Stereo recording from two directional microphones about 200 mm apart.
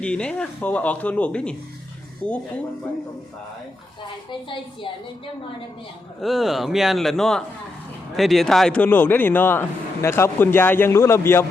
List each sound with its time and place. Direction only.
0.0 s speech: 5° left (ahead or behind)
4.3 s a woman's voice: 25° left (ahead or behind)
6.2 s a man's voice: centre (ahead or behind)